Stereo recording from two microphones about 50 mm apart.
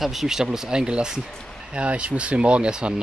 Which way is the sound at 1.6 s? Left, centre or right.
Right.